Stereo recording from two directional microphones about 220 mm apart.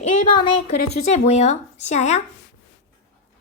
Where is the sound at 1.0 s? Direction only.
30° left (ahead or behind).